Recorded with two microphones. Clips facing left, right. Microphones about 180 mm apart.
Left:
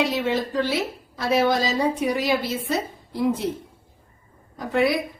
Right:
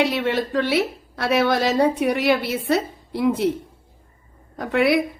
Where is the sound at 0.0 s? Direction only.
65° right (ahead or behind).